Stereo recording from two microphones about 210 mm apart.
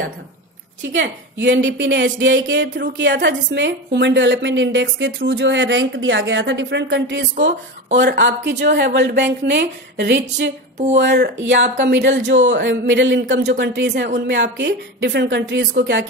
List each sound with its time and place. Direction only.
0.9 s a woman's voice: 55° right (ahead or behind)